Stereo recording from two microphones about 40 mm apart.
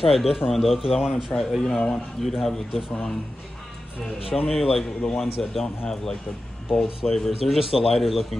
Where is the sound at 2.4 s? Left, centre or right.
Centre.